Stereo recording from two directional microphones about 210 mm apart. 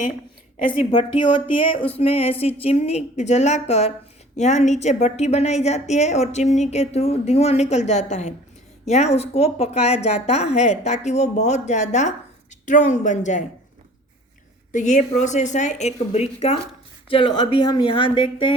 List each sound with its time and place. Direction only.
0.7 s a woman's voice: 20° left (ahead or behind)
14.7 s a woman's voice: 35° left (ahead or behind)